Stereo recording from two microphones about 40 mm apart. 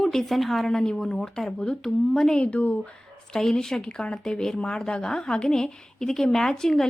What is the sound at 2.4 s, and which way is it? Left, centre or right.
Speech, left.